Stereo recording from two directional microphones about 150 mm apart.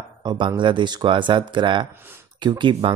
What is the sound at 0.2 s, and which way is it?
Speech, 30° right (ahead or behind).